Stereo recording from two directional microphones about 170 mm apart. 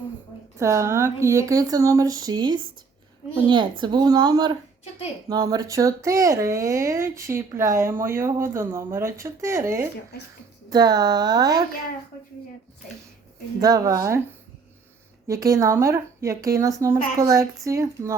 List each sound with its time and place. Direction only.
0.6 s speech: 15° right (ahead or behind)
13.6 s speech: 20° right (ahead or behind)
15.3 s speech: 20° right (ahead or behind)